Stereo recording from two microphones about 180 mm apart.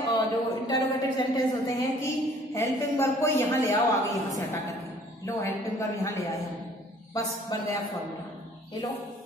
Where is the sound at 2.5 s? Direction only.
15° left (ahead or behind).